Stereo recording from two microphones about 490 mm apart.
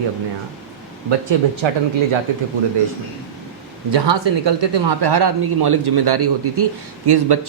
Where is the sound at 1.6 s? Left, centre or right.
Right.